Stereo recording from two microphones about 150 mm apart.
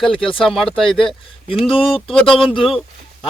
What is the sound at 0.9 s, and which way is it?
Speech, 35° left (ahead or behind).